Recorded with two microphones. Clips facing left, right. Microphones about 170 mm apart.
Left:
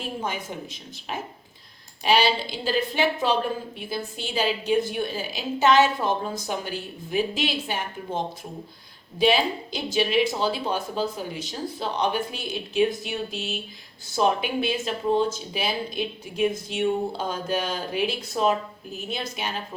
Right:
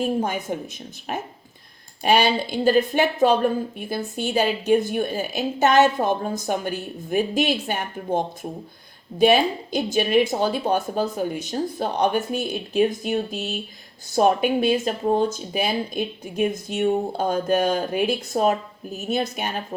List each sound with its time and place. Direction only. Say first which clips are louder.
0.0 s speech: right 7 dB; 45° right (ahead or behind)